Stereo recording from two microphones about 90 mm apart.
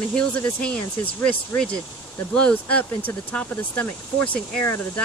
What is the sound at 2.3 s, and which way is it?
Speech, 15° left (ahead or behind).